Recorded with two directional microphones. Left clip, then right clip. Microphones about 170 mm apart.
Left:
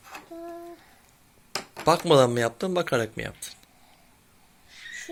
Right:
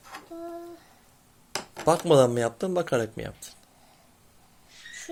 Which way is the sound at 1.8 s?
Centre (ahead or behind).